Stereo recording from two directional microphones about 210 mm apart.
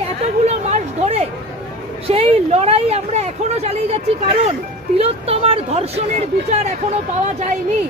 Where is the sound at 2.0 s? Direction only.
30° right (ahead or behind).